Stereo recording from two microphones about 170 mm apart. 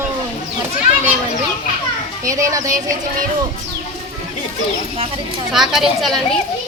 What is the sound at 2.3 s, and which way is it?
Speech, 20° right (ahead or behind).